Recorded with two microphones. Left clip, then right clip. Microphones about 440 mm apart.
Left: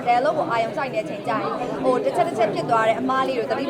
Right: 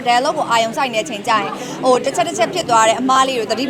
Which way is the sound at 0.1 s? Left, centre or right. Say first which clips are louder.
Right 5 dB; right.